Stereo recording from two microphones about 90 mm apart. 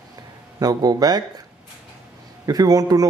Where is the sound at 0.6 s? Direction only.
45° right (ahead or behind).